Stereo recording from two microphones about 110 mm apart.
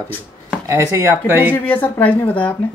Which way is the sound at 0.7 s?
25° right (ahead or behind).